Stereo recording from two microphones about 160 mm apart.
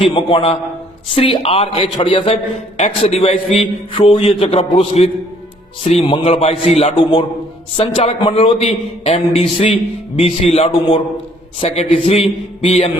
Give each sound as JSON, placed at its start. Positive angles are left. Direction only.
{"t": 0.0, "sound": "a man's voice", "side_deg": 35}